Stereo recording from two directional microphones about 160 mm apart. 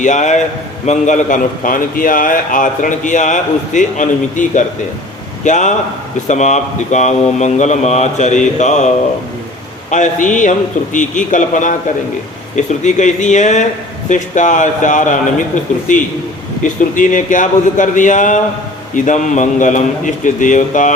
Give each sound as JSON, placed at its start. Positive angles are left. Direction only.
{"t": 0.0, "sound": "a man's voice", "side_deg": 50}
{"t": 9.9, "sound": "a man's voice", "side_deg": 50}